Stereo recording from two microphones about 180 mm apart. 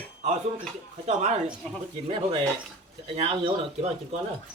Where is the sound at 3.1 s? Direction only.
30° right (ahead or behind).